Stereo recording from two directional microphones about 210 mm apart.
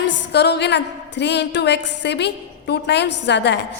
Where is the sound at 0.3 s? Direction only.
55° left (ahead or behind).